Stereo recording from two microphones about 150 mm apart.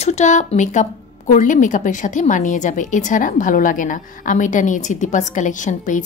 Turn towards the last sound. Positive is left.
turn(degrees=55)  # may be behind; listen again after turning